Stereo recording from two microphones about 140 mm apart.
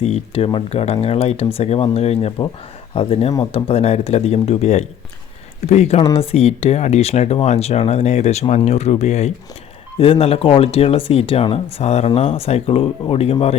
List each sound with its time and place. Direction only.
0.0 s speech: 45° left (ahead or behind)
10.0 s speech: 45° left (ahead or behind)